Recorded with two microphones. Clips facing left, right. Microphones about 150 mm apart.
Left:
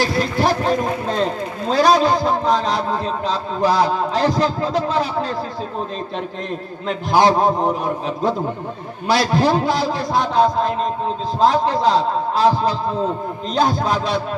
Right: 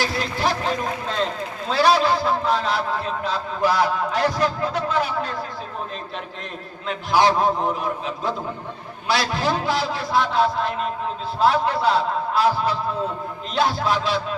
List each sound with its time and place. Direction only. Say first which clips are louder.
0.0 s a man's voice: left 5 dB; 45° left (ahead or behind)
6.8 s a man's voice: left 3 dB; 40° left (ahead or behind)